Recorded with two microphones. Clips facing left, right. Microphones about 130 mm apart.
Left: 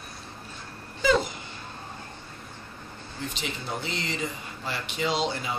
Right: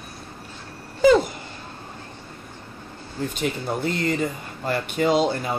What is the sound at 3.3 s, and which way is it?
Speech, 50° right (ahead or behind).